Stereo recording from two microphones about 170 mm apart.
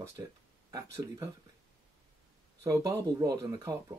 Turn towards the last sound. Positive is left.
turn(degrees=-20)  # may be behind; listen again after turning